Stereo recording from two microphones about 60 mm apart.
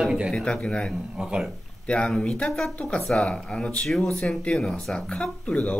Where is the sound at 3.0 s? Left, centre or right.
Centre.